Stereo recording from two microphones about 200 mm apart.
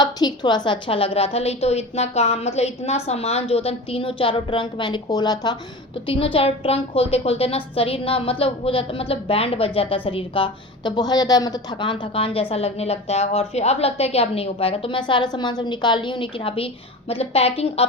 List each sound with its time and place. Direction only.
0.0 s a woman's voice: 20° left (ahead or behind)